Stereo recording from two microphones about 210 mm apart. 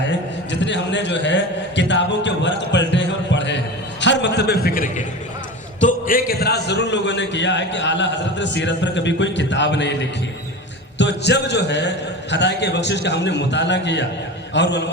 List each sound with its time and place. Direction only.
0.0 s a man's voice: 60° left (ahead or behind)